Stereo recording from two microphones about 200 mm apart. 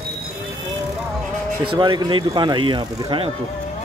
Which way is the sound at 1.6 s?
25° right (ahead or behind).